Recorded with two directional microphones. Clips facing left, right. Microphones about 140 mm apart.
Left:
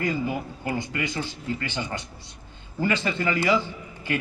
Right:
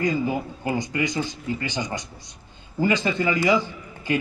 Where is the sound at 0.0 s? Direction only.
20° right (ahead or behind).